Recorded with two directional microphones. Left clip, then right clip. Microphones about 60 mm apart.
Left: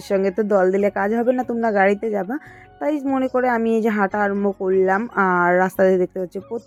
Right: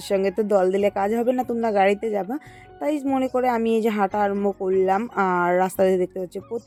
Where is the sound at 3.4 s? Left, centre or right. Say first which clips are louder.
Left 2 dB; left.